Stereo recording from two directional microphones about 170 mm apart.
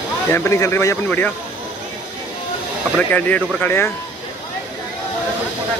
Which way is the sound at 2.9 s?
10° left (ahead or behind).